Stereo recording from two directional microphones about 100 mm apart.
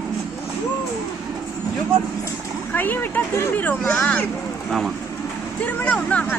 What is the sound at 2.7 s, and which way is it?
Speech, 20° left (ahead or behind).